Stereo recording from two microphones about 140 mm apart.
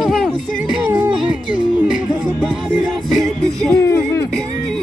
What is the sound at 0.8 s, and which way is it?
Music, 15° right (ahead or behind).